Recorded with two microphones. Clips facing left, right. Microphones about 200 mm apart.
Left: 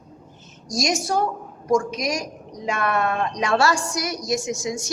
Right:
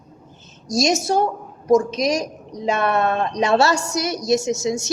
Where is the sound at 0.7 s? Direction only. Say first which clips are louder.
Right 5 dB; 25° right (ahead or behind).